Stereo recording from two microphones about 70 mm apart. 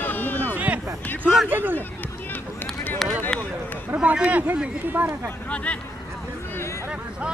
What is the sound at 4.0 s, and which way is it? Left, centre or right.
Speech, centre.